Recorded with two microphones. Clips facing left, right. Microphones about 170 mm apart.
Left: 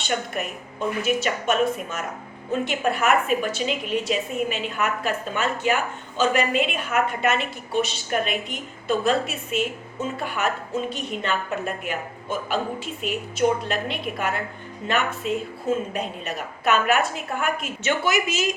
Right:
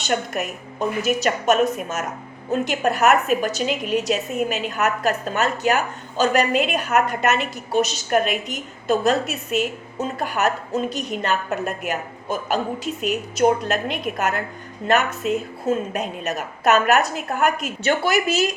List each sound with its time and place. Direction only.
0.1 s a woman's voice: 40° right (ahead or behind)
15.2 s a woman's voice: 5° right (ahead or behind)
15.6 s a woman's voice: 45° right (ahead or behind)